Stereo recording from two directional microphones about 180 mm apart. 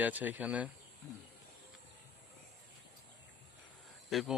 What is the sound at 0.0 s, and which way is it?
Speech, 10° right (ahead or behind).